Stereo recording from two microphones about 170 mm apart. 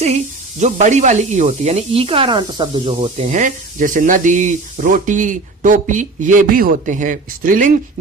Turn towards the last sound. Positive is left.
turn(degrees=-50)  # may be behind; listen again after turning